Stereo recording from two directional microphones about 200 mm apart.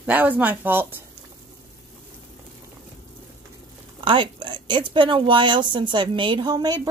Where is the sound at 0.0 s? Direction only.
10° right (ahead or behind).